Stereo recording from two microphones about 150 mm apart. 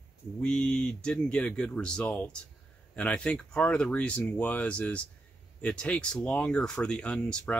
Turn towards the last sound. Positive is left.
turn(degrees=5)  # may be behind; listen again after turning